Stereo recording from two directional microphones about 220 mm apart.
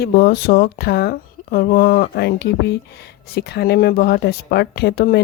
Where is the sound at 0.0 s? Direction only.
45° left (ahead or behind).